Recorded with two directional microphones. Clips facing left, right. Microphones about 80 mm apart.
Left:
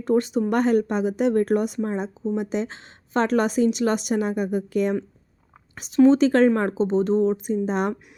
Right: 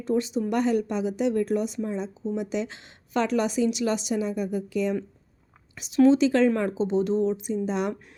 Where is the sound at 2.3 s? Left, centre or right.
Left.